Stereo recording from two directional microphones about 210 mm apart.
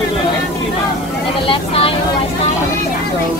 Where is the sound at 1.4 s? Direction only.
25° left (ahead or behind).